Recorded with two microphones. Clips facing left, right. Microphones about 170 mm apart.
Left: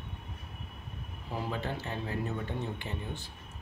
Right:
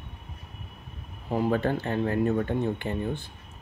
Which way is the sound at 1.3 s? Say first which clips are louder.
Right 10 dB; 55° right (ahead or behind).